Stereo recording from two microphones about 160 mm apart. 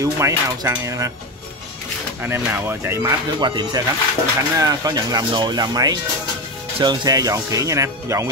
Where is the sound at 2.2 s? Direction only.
15° right (ahead or behind).